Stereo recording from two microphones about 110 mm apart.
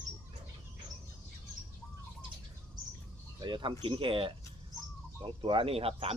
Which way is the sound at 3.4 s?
45° right (ahead or behind).